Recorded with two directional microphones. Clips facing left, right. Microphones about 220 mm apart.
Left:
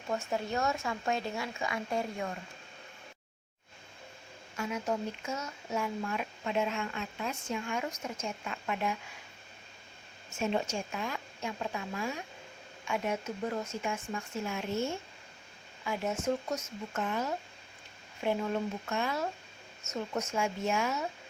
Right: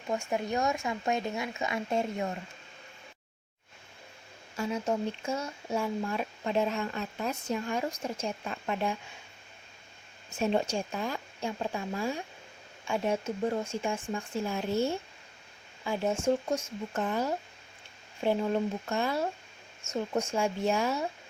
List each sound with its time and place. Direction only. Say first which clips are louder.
0.1 s speech: right 2 dB; 15° right (ahead or behind)
4.5 s speech: right 3 dB; 30° right (ahead or behind)
10.3 s speech: right 4 dB; 35° right (ahead or behind)